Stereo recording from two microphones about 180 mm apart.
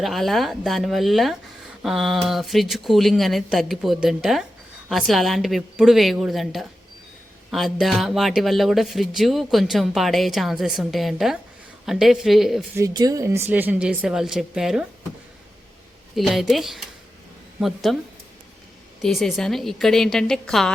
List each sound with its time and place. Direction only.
0.0 s speech: centre (ahead or behind)
12.7 s speech: 20° right (ahead or behind); by 14.8 s 5° right (ahead or behind)
16.1 s speech: centre (ahead or behind)
19.0 s speech: 5° left (ahead or behind)